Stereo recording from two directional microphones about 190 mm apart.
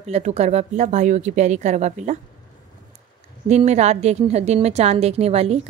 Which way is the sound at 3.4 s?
35° right (ahead or behind).